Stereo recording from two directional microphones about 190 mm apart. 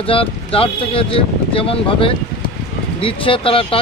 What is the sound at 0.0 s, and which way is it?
Speech, 30° left (ahead or behind).